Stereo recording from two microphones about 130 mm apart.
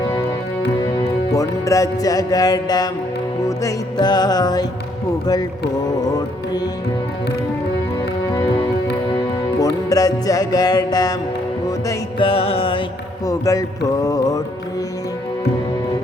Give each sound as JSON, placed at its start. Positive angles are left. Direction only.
{"t": 0.9, "sound": "music", "side_deg": 25}
{"t": 9.6, "sound": "music", "side_deg": 30}
{"t": 12.2, "sound": "music", "side_deg": 45}
{"t": 13.2, "sound": "music", "side_deg": 25}